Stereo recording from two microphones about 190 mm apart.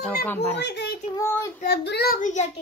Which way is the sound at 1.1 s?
15° left (ahead or behind).